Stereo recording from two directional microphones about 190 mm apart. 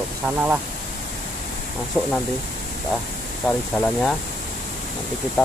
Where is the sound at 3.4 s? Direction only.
5° left (ahead or behind).